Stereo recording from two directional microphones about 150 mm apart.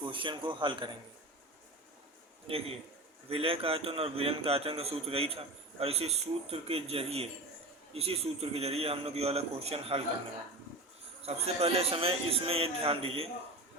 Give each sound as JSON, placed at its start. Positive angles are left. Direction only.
{"t": 0.0, "sound": "a man's voice", "side_deg": -35}
{"t": 2.5, "sound": "a man's voice", "side_deg": -40}
{"t": 11.2, "sound": "a man's voice", "side_deg": -40}